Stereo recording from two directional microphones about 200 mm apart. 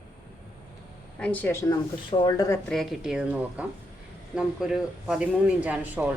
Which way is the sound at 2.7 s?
Centre (ahead or behind).